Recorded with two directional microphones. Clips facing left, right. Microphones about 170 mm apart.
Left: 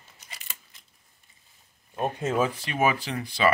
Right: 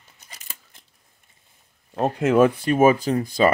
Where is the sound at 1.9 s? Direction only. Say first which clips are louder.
Right 8 dB; 85° right; by 3.5 s 45° right (ahead or behind).